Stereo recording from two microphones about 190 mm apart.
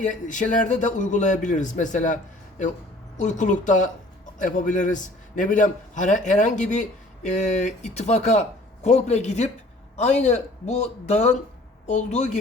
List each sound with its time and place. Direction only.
0.0 s a man's voice: 40° left (ahead or behind)
3.2 s a man's voice: 40° left (ahead or behind)